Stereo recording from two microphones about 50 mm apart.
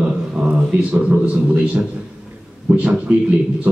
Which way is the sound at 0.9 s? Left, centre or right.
Right.